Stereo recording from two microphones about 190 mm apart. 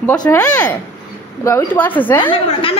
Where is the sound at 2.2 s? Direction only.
30° left (ahead or behind).